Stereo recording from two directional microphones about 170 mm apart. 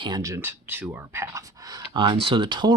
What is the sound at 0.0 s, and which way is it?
Speech, 20° right (ahead or behind).